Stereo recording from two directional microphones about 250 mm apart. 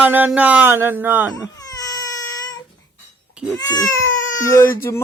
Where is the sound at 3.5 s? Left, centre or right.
Centre.